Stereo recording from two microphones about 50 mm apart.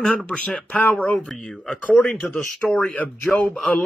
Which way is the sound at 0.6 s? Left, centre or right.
Left.